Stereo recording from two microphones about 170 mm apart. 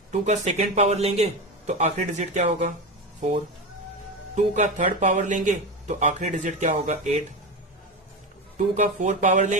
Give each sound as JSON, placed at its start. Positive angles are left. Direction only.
{"t": 0.1, "sound": "speech", "side_deg": -45}
{"t": 4.4, "sound": "speech", "side_deg": -45}
{"t": 8.5, "sound": "speech", "side_deg": -45}